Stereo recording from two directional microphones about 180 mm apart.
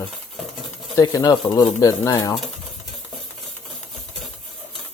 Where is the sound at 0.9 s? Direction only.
20° left (ahead or behind).